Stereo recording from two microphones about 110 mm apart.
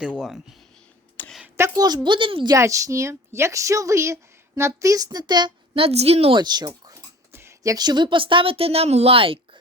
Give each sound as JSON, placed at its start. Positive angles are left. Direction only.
{"t": 0.0, "sound": "speech", "side_deg": -5}
{"t": 1.2, "sound": "a sound", "side_deg": 20}
{"t": 1.5, "sound": "a woman's voice", "side_deg": -25}
{"t": 1.8, "sound": "speech", "side_deg": -40}
{"t": 2.5, "sound": "a woman's voice", "side_deg": -30}
{"t": 5.8, "sound": "a woman's voice", "side_deg": -70}
{"t": 6.3, "sound": "speech", "side_deg": -40}